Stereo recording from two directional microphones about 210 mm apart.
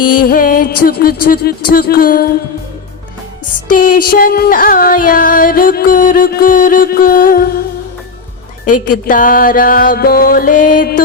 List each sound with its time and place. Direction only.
0.1 s music: 40° left (ahead or behind)
3.7 s music: 40° left (ahead or behind)
8.6 s music: 40° left (ahead or behind)